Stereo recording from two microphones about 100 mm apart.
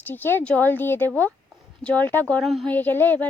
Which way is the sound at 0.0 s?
20° left (ahead or behind).